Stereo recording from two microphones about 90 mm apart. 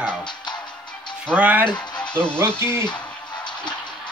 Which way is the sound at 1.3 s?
20° right (ahead or behind).